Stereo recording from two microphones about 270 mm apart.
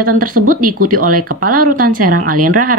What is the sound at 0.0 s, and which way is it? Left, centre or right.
Speech, right.